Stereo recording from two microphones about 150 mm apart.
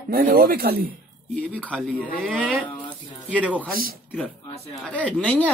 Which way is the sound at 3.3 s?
10° right (ahead or behind).